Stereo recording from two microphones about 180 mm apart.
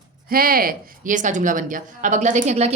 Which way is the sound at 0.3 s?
55° right (ahead or behind).